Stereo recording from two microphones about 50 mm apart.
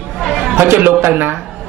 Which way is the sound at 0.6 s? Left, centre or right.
Right.